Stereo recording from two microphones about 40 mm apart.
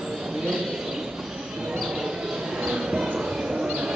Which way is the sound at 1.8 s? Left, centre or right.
Centre.